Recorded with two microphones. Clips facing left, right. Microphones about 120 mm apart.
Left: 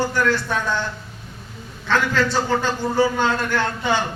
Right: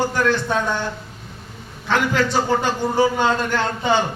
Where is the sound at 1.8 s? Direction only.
15° right (ahead or behind).